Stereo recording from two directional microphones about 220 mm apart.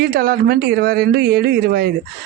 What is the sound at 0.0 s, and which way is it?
Speech, 45° right (ahead or behind).